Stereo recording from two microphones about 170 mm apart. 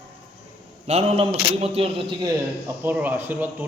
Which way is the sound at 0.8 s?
40° right (ahead or behind).